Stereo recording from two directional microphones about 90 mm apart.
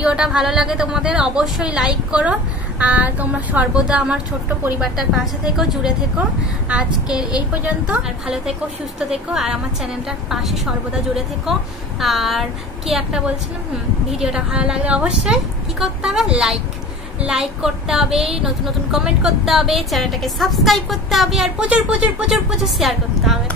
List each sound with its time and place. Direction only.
0.0 s a woman's voice: 10° right (ahead or behind)
7.6 s a woman's voice: 15° right (ahead or behind)
12.0 s a woman's voice: centre (ahead or behind)